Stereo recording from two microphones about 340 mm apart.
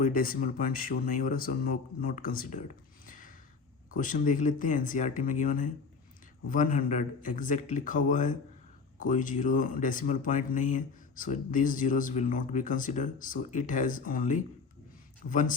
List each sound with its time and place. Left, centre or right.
0.0 s speech: left
3.1 s a sound: left
3.9 s speech: left